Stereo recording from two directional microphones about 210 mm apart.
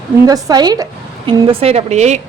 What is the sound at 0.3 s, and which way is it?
A woman's voice, 15° right (ahead or behind).